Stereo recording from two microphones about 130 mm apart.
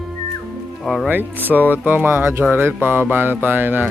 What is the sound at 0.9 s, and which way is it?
Speech, centre (ahead or behind).